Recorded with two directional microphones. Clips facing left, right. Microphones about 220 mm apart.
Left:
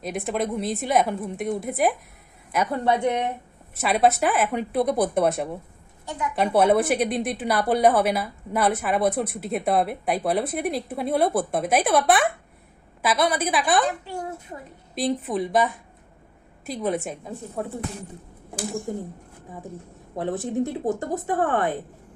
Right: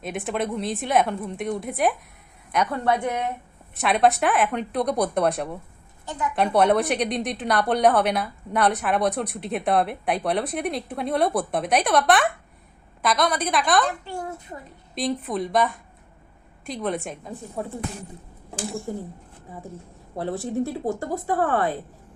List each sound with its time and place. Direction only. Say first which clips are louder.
0.0 s a woman's voice: left 1 dB; centre (ahead or behind)
2.6 s speech: left 4 dB; 25° left (ahead or behind)
3.8 s a woman's voice: even; centre (ahead or behind)
6.1 s a woman's voice: even; 5° left (ahead or behind)
20.1 s speech: left 1 dB; 20° left (ahead or behind)